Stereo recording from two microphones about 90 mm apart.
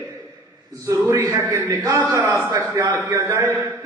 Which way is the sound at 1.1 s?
40° right (ahead or behind).